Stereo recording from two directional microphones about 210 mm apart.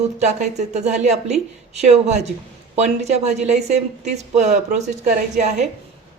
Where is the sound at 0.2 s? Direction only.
35° right (ahead or behind).